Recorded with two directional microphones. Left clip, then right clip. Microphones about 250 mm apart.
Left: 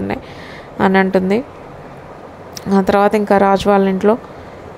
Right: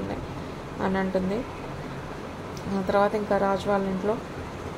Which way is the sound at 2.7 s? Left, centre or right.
Left.